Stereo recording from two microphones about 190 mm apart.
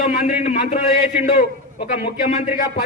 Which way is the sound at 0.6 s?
40° left (ahead or behind).